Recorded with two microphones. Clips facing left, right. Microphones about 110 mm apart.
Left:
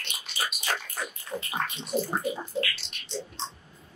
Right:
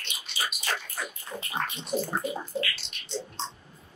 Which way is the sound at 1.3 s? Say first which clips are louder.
Left 6 dB; 20° left (ahead or behind).